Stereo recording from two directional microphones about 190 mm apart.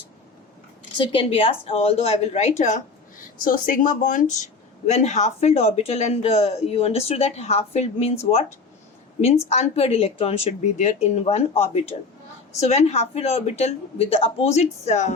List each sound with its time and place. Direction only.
0.9 s a woman's voice: 25° left (ahead or behind)
9.5 s speech: 35° left (ahead or behind)